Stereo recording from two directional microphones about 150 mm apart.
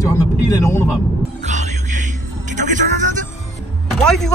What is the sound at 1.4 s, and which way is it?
Music, 55° right (ahead or behind).